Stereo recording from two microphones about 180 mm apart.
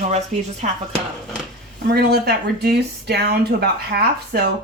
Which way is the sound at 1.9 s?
60° right (ahead or behind).